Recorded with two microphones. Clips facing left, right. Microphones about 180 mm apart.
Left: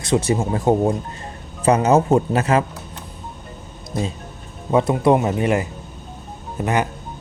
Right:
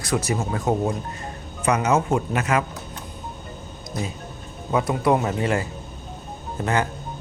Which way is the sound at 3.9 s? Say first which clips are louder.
Left 5 dB; 30° left (ahead or behind).